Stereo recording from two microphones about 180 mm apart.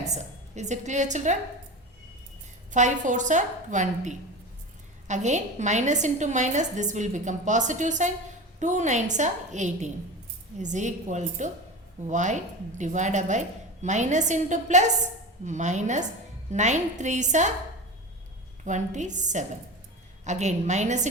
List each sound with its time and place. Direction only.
0.0 s a woman's voice: 40° right (ahead or behind)
2.7 s a woman's voice: 45° right (ahead or behind)
18.6 s a woman's voice: 40° right (ahead or behind)